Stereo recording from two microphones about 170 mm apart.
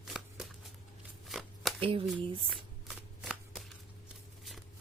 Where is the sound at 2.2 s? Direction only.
30° right (ahead or behind).